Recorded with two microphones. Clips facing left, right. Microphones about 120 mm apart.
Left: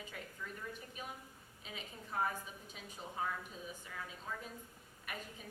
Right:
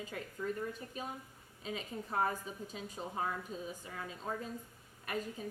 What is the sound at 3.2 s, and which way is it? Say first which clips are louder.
Speech: right 2 dB; 55° right (ahead or behind).